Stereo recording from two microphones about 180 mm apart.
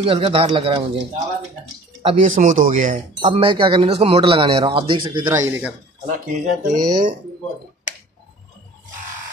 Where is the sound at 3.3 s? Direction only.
30° right (ahead or behind).